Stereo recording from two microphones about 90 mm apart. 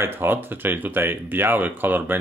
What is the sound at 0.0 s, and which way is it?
Speech, 25° right (ahead or behind).